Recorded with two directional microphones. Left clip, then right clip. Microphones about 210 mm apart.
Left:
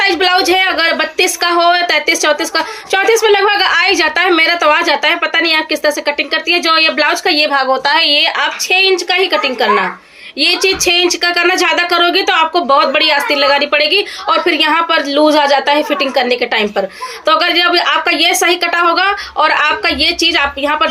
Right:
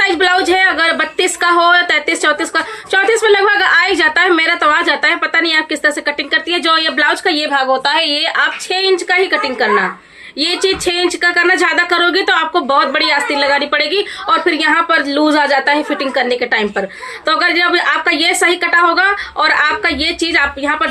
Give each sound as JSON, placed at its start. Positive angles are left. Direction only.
{"t": 0.0, "sound": "a woman's voice", "side_deg": -15}